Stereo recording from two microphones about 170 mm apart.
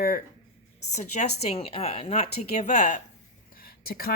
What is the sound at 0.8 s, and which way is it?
Speech, 40° left (ahead or behind).